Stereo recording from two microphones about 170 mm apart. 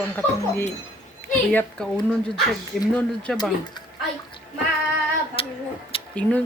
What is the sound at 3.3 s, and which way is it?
Speech, centre (ahead or behind).